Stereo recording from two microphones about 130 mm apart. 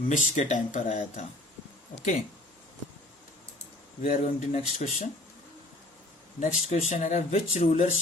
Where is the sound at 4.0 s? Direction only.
60° left (ahead or behind).